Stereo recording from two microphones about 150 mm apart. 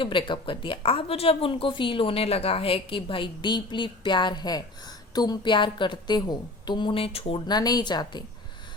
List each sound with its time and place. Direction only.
0.0 s a woman's voice: 35° left (ahead or behind)